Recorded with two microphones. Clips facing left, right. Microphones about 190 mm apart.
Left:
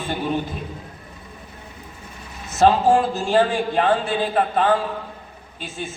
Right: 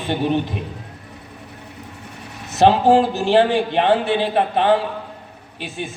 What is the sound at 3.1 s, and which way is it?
A man's voice, 65° right (ahead or behind).